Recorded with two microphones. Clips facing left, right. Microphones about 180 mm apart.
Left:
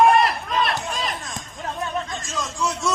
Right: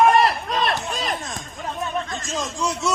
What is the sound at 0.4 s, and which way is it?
Run, 45° right (ahead or behind).